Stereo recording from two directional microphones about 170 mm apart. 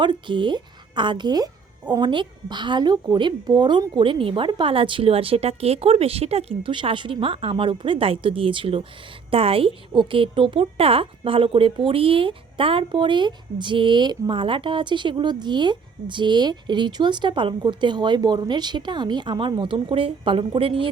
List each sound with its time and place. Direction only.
0.0 s a woman's voice: 30° right (ahead or behind)